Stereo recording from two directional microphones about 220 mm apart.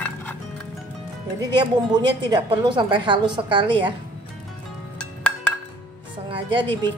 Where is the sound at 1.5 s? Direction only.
20° right (ahead or behind).